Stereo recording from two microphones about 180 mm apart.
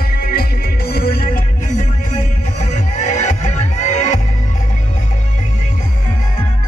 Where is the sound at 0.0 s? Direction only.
55° left (ahead or behind).